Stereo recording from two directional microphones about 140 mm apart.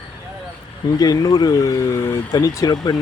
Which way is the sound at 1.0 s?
25° left (ahead or behind).